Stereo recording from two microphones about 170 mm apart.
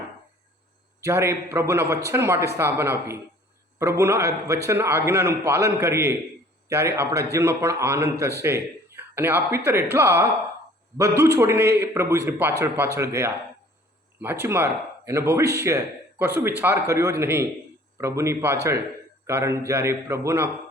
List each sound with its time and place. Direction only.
1.0 s speech: 15° right (ahead or behind)